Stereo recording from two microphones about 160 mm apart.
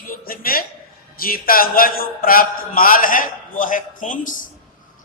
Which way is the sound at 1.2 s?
65° left (ahead or behind).